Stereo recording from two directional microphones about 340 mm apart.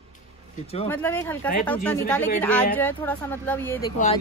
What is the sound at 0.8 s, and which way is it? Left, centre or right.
A woman's voice, centre.